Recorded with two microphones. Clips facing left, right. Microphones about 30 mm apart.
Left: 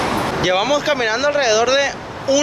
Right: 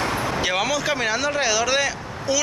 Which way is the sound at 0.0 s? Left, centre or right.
Left.